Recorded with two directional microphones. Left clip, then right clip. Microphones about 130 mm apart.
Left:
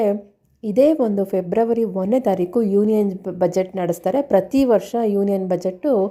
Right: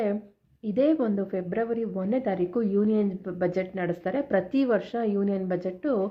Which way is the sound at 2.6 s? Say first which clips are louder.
Left 8 dB; 35° left (ahead or behind).